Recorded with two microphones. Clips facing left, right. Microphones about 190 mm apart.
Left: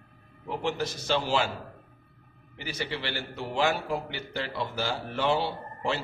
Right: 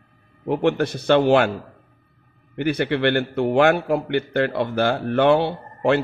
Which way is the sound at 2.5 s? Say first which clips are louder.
Right 13 dB; 60° right (ahead or behind).